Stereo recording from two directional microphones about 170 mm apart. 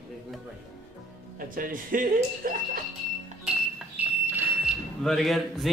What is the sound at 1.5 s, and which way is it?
Speech, 55° right (ahead or behind).